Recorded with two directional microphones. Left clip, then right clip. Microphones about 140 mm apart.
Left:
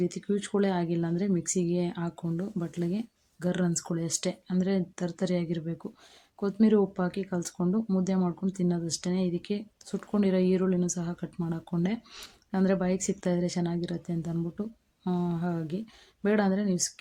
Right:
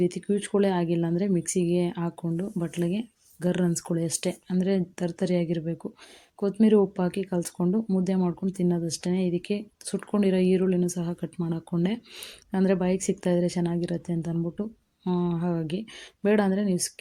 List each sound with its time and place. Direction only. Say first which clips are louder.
0.0 s speech: right 4 dB; 15° right (ahead or behind)